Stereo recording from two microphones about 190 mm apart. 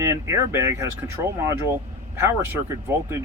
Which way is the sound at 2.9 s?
15° right (ahead or behind).